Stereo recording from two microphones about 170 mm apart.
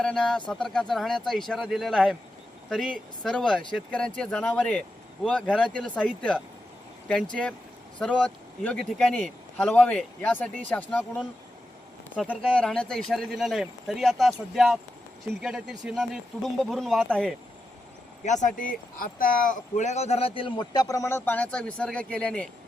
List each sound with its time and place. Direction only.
0.0 s a man's voice: 5° left (ahead or behind)
12.5 s speech: 5° left (ahead or behind)
18.3 s speech: 45° left (ahead or behind); by 22.4 s 5° left (ahead or behind)